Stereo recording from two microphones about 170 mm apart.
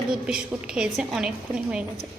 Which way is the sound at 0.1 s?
5° right (ahead or behind).